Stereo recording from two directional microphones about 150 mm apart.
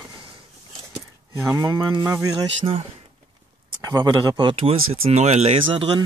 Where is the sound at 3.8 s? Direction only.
25° right (ahead or behind).